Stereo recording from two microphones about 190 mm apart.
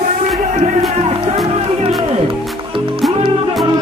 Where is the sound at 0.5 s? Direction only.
35° right (ahead or behind).